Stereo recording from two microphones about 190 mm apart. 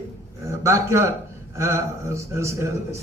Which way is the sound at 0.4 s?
15° right (ahead or behind).